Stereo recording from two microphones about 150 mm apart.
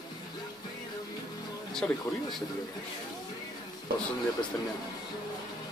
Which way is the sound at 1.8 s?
5° left (ahead or behind).